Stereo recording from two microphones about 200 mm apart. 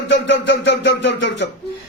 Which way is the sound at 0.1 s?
65° left (ahead or behind).